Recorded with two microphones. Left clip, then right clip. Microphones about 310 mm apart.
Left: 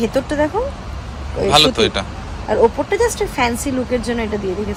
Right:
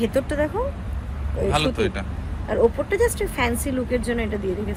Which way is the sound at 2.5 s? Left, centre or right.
Left.